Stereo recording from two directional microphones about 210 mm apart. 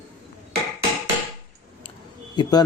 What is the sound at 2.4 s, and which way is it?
Speech, 20° left (ahead or behind).